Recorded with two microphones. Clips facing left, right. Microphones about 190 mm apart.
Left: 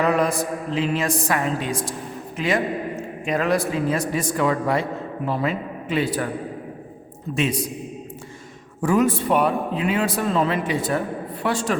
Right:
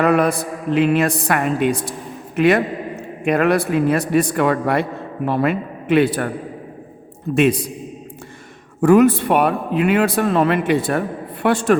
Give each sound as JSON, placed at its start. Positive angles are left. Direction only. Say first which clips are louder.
{"t": 0.0, "sound": "a man's voice", "louder": "right 4 dB", "side_deg": -65}
{"t": 7.3, "sound": "a man's voice", "louder": "right 7 dB", "side_deg": -55}
{"t": 8.8, "sound": "a man's voice", "louder": "right 7 dB", "side_deg": -65}